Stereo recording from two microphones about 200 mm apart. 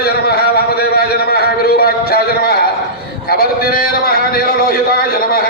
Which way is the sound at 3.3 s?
50° left (ahead or behind).